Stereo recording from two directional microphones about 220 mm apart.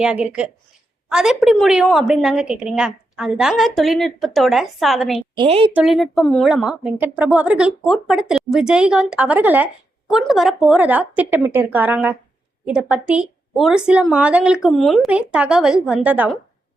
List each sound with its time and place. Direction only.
0.0 s a woman's voice: 5° right (ahead or behind)
5.4 s a woman's voice: 25° right (ahead or behind)
5.7 s a woman's voice: centre (ahead or behind)